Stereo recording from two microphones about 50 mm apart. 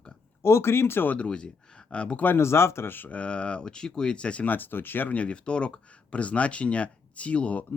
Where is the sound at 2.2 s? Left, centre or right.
Left.